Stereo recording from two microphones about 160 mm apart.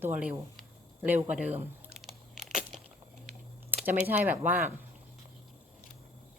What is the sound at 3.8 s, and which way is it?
Speech, 10° right (ahead or behind).